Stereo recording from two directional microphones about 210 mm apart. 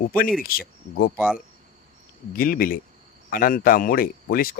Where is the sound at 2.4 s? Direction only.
45° left (ahead or behind).